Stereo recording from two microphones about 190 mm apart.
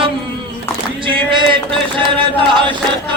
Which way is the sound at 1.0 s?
25° right (ahead or behind).